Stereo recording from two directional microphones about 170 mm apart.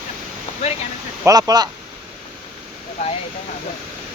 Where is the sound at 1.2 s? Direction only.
20° right (ahead or behind).